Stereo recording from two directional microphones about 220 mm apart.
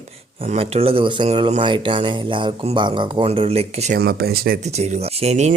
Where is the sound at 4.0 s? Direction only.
45° right (ahead or behind).